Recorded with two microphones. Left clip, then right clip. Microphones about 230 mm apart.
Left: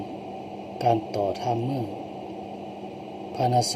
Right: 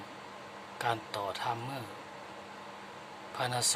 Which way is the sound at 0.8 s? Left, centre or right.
Right.